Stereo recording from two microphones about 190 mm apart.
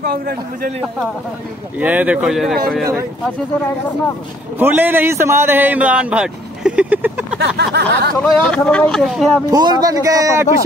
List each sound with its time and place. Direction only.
0.0 s a man's voice: 50° right (ahead or behind)
1.8 s a man's voice: 10° right (ahead or behind)
4.6 s a man's voice: 10° right (ahead or behind)
7.3 s a sound: 60° right (ahead or behind)
8.2 s speech: 5° left (ahead or behind)
9.5 s speech: 20° right (ahead or behind)